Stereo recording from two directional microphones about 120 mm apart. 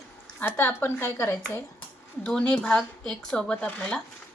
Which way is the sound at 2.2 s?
10° left (ahead or behind).